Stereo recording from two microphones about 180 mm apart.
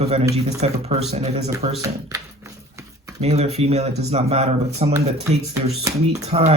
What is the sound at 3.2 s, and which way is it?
Speech, 35° right (ahead or behind).